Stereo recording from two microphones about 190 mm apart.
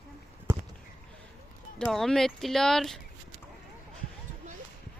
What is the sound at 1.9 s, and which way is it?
Speech, centre (ahead or behind).